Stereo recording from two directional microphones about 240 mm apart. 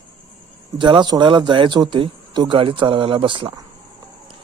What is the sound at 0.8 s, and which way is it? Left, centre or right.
Speech, centre.